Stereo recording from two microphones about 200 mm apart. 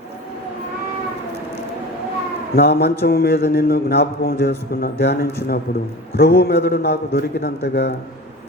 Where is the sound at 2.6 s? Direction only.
55° left (ahead or behind).